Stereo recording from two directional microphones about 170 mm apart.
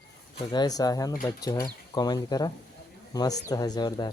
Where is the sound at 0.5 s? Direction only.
25° left (ahead or behind).